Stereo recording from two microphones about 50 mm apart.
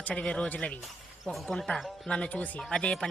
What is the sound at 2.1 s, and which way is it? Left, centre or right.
Speech, left.